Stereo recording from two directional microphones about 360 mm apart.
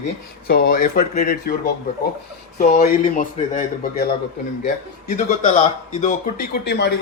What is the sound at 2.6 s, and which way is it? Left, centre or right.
Speech, left.